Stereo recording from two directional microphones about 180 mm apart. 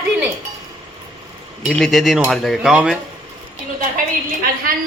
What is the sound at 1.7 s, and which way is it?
Speech, centre (ahead or behind).